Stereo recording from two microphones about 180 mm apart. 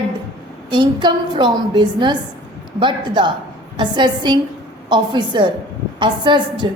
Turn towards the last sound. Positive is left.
turn(degrees=-25)  # may be behind; listen again after turning